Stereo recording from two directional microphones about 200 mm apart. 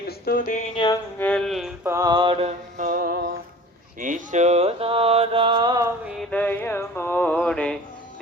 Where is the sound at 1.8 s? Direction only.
15° right (ahead or behind); by 3.3 s 45° right (ahead or behind).